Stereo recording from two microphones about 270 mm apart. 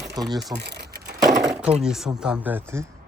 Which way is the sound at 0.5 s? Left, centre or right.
Right.